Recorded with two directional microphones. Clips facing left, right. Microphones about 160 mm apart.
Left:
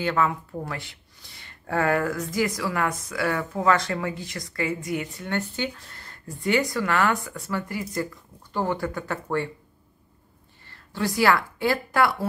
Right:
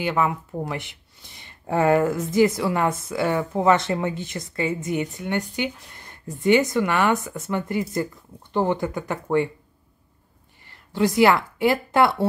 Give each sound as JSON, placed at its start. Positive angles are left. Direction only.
{"t": 0.0, "sound": "speech", "side_deg": -15}
{"t": 10.7, "sound": "a woman's voice", "side_deg": -20}